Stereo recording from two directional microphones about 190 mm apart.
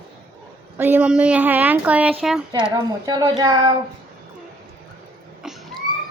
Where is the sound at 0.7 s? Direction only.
10° right (ahead or behind).